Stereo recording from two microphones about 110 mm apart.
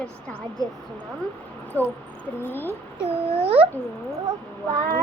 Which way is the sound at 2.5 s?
20° left (ahead or behind).